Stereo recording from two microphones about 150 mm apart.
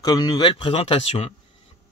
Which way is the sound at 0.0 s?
25° left (ahead or behind).